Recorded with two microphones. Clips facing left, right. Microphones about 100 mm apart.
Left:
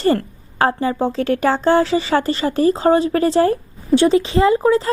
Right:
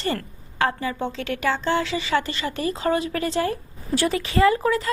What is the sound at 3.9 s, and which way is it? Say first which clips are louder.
Speech: left 9 dB; 25° left (ahead or behind).